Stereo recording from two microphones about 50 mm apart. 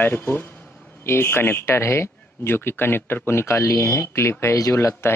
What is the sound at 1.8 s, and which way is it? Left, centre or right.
Speech, left.